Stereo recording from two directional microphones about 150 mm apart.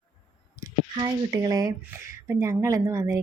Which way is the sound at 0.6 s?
20° right (ahead or behind).